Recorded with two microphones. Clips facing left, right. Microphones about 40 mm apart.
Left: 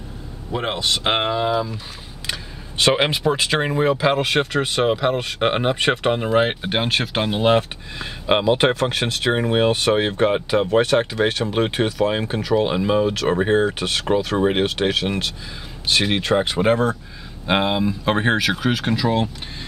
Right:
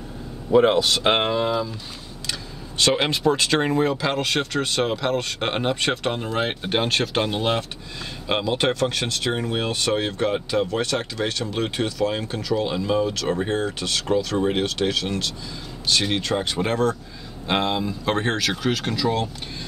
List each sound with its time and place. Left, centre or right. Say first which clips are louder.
0.5 s speech: right 6 dB; centre
2.2 s speech: left 3 dB; left